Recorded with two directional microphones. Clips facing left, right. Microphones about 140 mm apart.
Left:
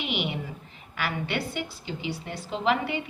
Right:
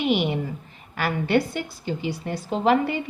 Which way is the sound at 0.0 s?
45° right (ahead or behind).